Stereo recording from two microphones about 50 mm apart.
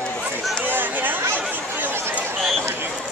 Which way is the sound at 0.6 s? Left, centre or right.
Right.